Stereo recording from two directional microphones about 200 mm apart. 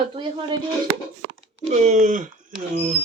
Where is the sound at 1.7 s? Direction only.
35° right (ahead or behind).